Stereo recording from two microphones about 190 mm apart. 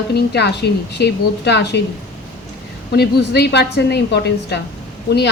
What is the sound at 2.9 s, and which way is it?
Speech, 60° left (ahead or behind).